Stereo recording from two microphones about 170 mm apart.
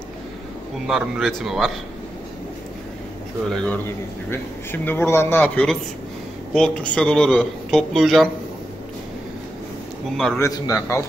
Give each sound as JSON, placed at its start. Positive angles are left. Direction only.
{"t": 0.8, "sound": "a man's voice", "side_deg": 0}
{"t": 3.4, "sound": "a man's voice", "side_deg": 5}
{"t": 10.1, "sound": "a man's voice", "side_deg": 5}
{"t": 10.4, "sound": "a man's voice", "side_deg": 20}